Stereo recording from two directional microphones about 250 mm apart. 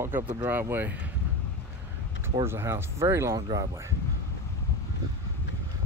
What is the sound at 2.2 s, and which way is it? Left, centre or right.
Speech, centre.